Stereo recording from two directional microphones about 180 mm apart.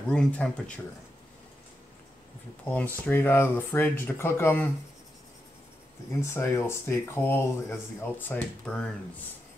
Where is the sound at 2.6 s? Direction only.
10° left (ahead or behind).